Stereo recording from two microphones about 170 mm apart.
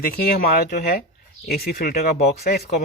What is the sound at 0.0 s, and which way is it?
Speech, 60° left (ahead or behind).